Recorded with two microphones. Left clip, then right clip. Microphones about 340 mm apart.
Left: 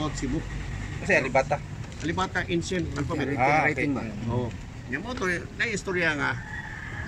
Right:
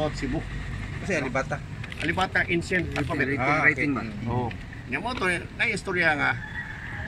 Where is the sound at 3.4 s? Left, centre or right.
Left.